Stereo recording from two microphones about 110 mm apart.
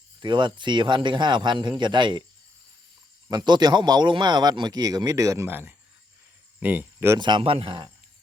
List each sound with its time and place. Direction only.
0.2 s a man's voice: 45° right (ahead or behind)
3.2 s a man's voice: 40° right (ahead or behind)
6.6 s speech: 15° right (ahead or behind)
7.2 s a man's voice: 45° right (ahead or behind)